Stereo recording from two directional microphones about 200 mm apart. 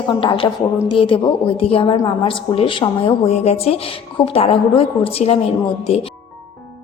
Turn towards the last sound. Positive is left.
turn(degrees=30)  # may be behind; listen again after turning